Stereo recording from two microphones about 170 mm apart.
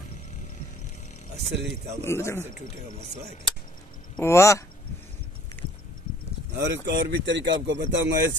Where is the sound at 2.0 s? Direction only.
15° left (ahead or behind).